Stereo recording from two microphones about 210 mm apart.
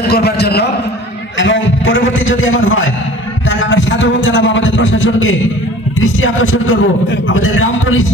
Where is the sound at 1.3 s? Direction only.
60° left (ahead or behind).